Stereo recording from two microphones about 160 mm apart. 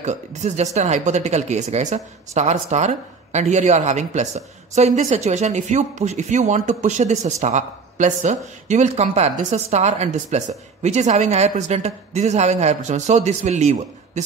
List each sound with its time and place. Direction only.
0.0 s a woman's voice: 45° right (ahead or behind)